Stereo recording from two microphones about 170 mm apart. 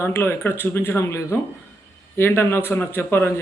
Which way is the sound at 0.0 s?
15° left (ahead or behind).